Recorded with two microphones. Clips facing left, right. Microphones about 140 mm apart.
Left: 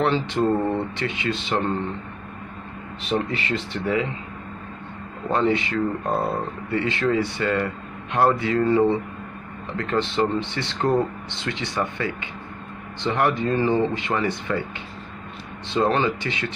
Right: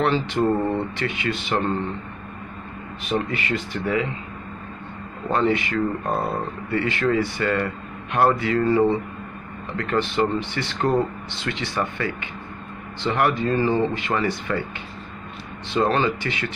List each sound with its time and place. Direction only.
0.0 s speech: 20° left (ahead or behind)
0.5 s speech: centre (ahead or behind)
0.9 s speech: 20° left (ahead or behind)
3.3 s speech: 30° left (ahead or behind)
5.3 s speech: 20° left (ahead or behind)
6.0 s speech: centre (ahead or behind)
6.7 s speech: 20° left (ahead or behind)
15.6 s speech: 20° left (ahead or behind)